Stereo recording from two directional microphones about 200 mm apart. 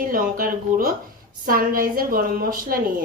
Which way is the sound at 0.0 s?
45° right (ahead or behind).